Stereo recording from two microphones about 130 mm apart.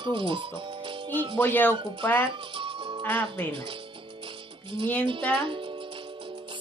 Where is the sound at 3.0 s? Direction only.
15° left (ahead or behind).